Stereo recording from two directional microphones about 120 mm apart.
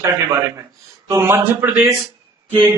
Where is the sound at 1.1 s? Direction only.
20° right (ahead or behind).